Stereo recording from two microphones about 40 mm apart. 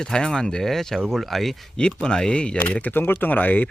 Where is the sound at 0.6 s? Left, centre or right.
Centre.